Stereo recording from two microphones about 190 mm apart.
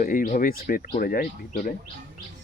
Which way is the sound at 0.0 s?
45° left (ahead or behind).